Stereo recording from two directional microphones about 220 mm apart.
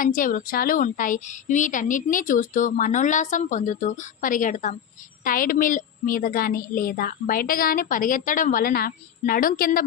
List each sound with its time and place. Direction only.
0.0 s a woman's voice: 40° left (ahead or behind)